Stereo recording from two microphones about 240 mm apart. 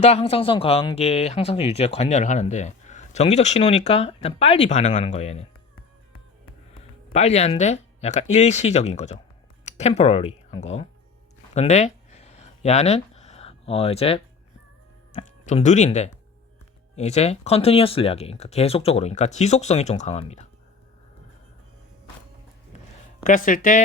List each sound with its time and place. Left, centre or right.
0.0 s speech: left
7.1 s speech: left
11.5 s a sound: left
15.1 s speech: left
23.2 s speech: left